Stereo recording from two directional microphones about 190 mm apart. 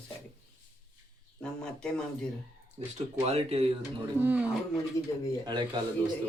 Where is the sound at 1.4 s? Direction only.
5° left (ahead or behind).